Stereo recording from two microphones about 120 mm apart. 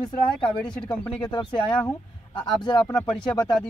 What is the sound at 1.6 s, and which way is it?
Speech, 10° left (ahead or behind).